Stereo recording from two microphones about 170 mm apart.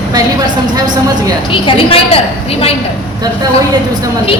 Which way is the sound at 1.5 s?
30° left (ahead or behind).